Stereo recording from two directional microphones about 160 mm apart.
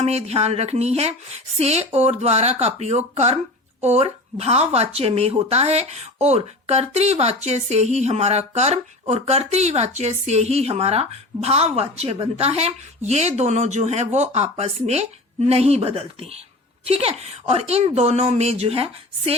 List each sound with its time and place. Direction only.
0.0 s speech: 40° right (ahead or behind)